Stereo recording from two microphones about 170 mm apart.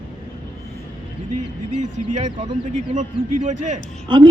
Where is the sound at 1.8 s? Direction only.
45° right (ahead or behind).